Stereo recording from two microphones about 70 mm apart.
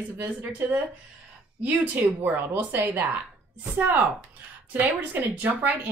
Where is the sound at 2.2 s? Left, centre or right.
Right.